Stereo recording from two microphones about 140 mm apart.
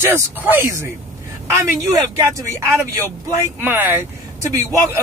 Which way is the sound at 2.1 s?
20° right (ahead or behind).